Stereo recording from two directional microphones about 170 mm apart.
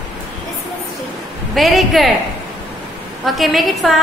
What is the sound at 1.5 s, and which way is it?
Speech, centre (ahead or behind).